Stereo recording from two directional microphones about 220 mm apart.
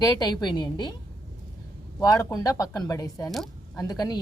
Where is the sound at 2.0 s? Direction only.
15° left (ahead or behind).